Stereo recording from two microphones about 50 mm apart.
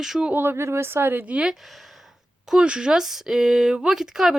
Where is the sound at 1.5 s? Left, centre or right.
Centre.